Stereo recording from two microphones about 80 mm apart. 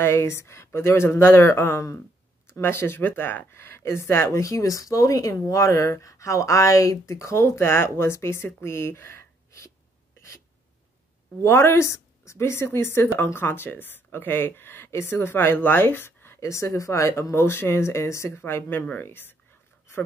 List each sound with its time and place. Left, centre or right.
0.0 s speech: left
10.1 s a sound: left
11.4 s speech: left
16.3 s speech: left